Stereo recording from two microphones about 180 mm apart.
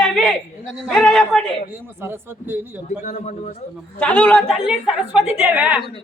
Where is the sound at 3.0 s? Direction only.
40° left (ahead or behind).